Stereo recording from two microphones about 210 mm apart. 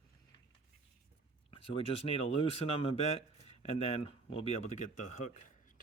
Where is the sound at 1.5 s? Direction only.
25° left (ahead or behind).